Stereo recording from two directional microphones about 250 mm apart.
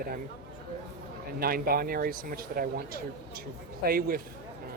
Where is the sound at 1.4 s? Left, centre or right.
Right.